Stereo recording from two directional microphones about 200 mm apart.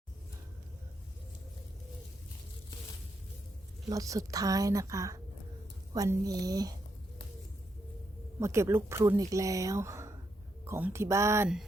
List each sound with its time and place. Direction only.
3.8 s speech: 15° right (ahead or behind)
8.4 s speech: 15° right (ahead or behind)